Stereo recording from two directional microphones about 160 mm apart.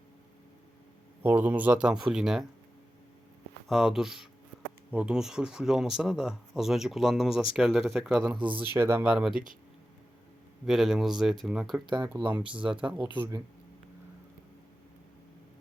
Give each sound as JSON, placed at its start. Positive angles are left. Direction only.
{"t": 1.2, "sound": "speech", "side_deg": -10}
{"t": 3.7, "sound": "speech", "side_deg": -5}
{"t": 8.4, "sound": "speech", "side_deg": -30}
{"t": 8.7, "sound": "speech", "side_deg": -15}
{"t": 9.1, "sound": "speech", "side_deg": -5}
{"t": 10.7, "sound": "speech", "side_deg": -5}
{"t": 12.0, "sound": "speech", "side_deg": -15}